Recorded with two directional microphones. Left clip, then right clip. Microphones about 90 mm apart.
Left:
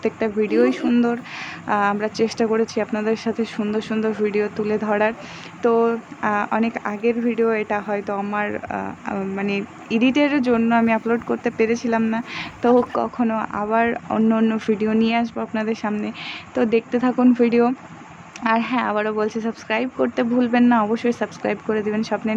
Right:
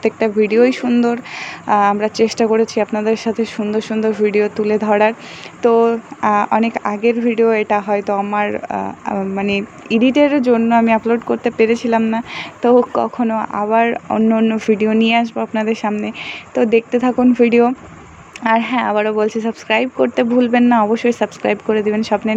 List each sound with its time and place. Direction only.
0.0 s speech: 55° right (ahead or behind); by 14.6 s 30° right (ahead or behind)
14.7 s speech: 50° right (ahead or behind)
16.0 s speech: 35° right (ahead or behind)